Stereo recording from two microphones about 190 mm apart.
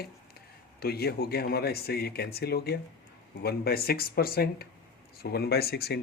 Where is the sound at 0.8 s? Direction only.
55° left (ahead or behind).